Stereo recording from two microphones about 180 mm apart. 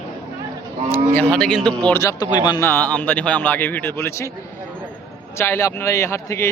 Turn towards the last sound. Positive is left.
turn(degrees=15)  # may be behind; listen again after turning